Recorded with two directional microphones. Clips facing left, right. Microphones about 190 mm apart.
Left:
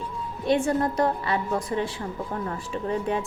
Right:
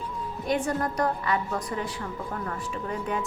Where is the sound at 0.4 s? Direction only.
25° left (ahead or behind).